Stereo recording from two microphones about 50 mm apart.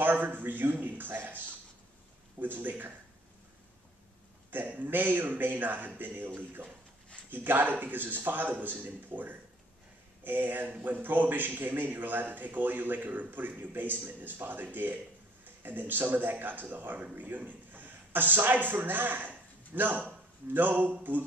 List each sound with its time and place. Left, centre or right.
0.0 s a man's voice: right
2.4 s a man's voice: right
4.5 s a man's voice: right